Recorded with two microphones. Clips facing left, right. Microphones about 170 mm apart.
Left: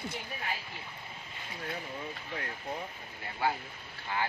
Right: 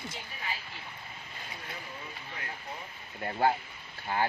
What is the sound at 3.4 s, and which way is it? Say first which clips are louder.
Speech: right 5 dB; 50° right (ahead or behind).